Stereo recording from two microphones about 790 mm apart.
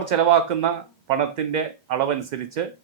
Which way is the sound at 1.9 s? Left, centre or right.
Right.